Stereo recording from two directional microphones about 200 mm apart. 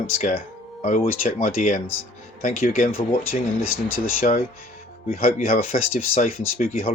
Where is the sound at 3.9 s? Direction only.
45° left (ahead or behind).